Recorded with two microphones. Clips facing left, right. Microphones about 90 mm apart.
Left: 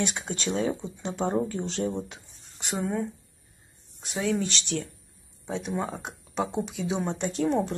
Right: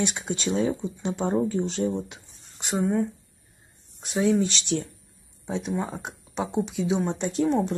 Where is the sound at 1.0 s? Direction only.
15° right (ahead or behind).